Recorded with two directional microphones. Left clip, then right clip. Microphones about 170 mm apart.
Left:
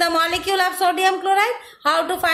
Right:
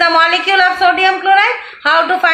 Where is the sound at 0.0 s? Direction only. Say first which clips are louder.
Right 9 dB; 75° left (ahead or behind).